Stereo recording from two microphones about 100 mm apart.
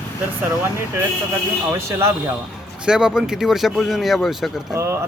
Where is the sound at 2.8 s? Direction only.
5° right (ahead or behind).